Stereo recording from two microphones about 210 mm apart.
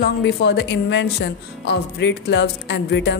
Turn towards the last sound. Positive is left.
turn(degrees=55)  # may be behind; listen again after turning